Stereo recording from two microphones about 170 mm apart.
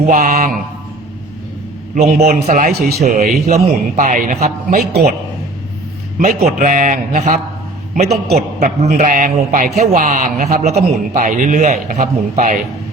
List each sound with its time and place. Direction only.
0.1 s a man's voice: 50° right (ahead or behind)
2.0 s a man's voice: 45° right (ahead or behind)
6.1 s a man's voice: 50° right (ahead or behind)
8.4 s a man's voice: 40° right (ahead or behind)